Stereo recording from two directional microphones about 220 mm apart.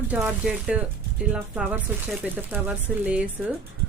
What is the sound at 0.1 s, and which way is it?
Speech, 5° right (ahead or behind).